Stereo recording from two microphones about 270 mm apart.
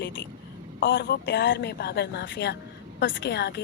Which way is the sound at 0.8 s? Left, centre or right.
Left.